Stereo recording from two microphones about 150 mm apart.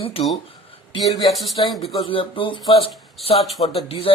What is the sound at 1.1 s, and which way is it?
Speech, centre (ahead or behind).